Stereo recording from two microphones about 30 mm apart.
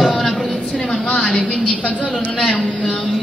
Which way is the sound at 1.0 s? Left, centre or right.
Left.